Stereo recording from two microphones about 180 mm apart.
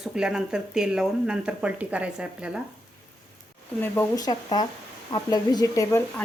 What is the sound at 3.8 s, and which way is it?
Speech, 10° left (ahead or behind).